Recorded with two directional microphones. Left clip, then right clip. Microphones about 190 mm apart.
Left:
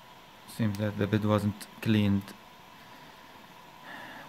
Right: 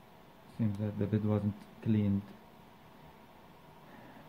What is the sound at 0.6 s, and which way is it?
Speech, 40° left (ahead or behind).